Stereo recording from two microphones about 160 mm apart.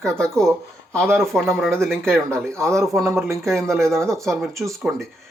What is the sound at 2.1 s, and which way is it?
Speech, 15° right (ahead or behind).